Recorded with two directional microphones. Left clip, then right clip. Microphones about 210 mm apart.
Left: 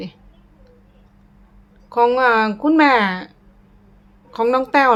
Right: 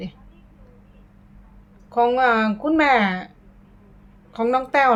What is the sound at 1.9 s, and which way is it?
Speech, 20° left (ahead or behind).